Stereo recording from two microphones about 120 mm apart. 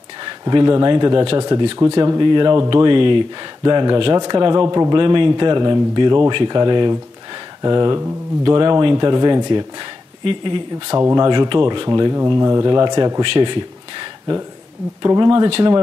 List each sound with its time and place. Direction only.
0.2 s speech: 35° right (ahead or behind)
10.2 s speech: 45° right (ahead or behind)
11.0 s speech: 30° right (ahead or behind)
11.9 s speech: 25° right (ahead or behind)
13.2 s a sound: 45° right (ahead or behind)
15.0 s speech: 30° right (ahead or behind)